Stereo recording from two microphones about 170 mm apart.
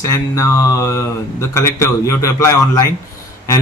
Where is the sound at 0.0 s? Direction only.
20° left (ahead or behind).